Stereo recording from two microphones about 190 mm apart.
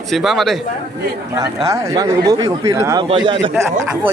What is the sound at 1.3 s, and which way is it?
A man's voice, 15° right (ahead or behind).